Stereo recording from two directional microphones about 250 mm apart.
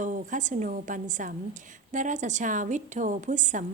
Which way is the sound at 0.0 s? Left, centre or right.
Right.